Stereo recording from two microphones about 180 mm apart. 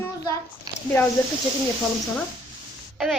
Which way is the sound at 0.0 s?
20° left (ahead or behind).